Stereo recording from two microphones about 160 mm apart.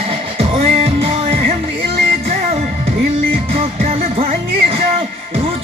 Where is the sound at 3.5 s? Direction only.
35° right (ahead or behind).